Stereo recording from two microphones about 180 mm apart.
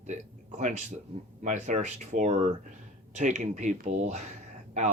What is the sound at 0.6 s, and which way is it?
Speech, 40° right (ahead or behind).